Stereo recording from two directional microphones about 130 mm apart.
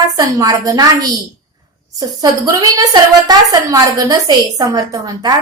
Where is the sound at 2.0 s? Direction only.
25° right (ahead or behind).